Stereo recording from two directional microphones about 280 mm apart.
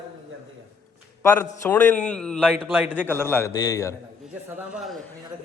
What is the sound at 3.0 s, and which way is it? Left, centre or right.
Speech, centre.